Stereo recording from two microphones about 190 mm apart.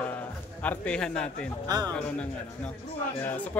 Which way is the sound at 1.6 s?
20° right (ahead or behind).